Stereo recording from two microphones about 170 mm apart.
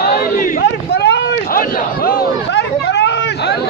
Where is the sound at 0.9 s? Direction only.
85° left.